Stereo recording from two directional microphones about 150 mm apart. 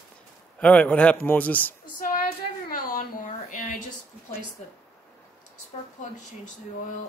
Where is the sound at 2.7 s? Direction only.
70° left (ahead or behind).